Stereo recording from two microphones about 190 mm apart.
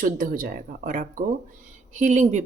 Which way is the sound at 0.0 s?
50° right (ahead or behind).